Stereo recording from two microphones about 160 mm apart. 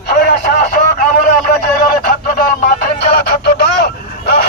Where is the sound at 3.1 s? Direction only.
90° left.